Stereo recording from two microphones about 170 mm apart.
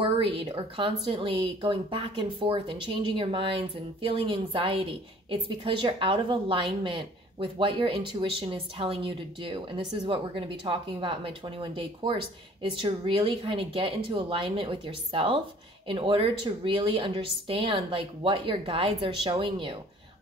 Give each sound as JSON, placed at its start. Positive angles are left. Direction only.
{"t": 0.0, "sound": "speech", "side_deg": -35}